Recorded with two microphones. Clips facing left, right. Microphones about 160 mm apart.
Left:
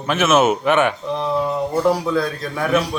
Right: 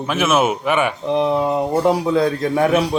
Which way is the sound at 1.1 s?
20° right (ahead or behind).